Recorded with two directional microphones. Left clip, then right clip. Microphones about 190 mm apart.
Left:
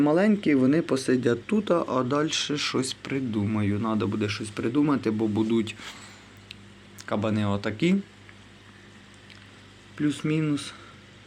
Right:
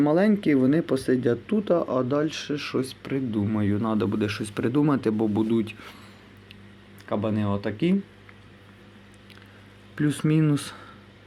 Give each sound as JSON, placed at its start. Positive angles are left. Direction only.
{"t": 0.0, "sound": "speech", "side_deg": -20}
{"t": 5.5, "sound": "speech", "side_deg": -10}
{"t": 7.0, "sound": "speech", "side_deg": 0}
{"t": 10.0, "sound": "speech", "side_deg": -40}